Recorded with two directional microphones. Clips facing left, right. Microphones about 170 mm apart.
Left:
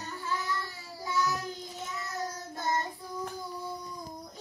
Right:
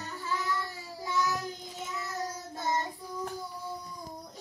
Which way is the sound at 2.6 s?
20° right (ahead or behind).